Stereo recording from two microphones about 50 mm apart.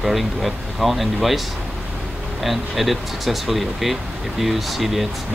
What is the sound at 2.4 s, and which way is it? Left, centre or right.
Speech, centre.